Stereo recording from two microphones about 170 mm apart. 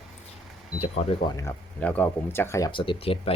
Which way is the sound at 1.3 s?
20° left (ahead or behind).